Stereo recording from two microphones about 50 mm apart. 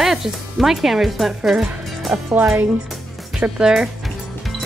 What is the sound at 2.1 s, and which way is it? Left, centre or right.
Speech, centre.